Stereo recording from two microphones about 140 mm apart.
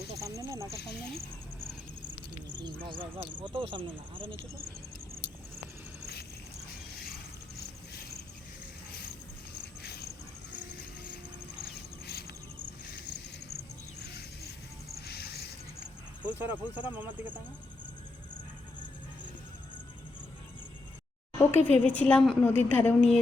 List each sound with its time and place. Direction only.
0.2 s snake: 20° right (ahead or behind)
2.6 s speech: 35° right (ahead or behind)
16.2 s speech: 15° right (ahead or behind)
21.3 s a sound: 15° left (ahead or behind)
21.8 s a woman's voice: 10° left (ahead or behind)